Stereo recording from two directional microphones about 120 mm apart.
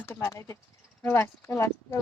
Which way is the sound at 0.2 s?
25° left (ahead or behind).